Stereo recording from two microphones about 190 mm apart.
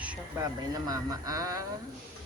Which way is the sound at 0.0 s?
5° right (ahead or behind).